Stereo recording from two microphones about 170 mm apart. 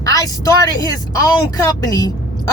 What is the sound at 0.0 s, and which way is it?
Speech, 20° left (ahead or behind).